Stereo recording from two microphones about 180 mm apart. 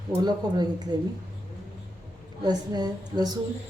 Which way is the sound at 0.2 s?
20° right (ahead or behind).